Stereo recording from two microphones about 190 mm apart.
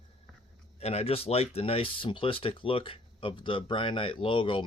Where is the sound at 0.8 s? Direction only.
30° left (ahead or behind).